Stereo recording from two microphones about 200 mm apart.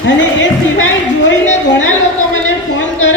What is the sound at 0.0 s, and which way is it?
Music, 70° left (ahead or behind).